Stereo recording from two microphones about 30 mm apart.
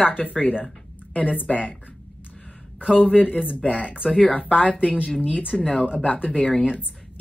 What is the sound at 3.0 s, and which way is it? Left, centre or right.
Speech, left.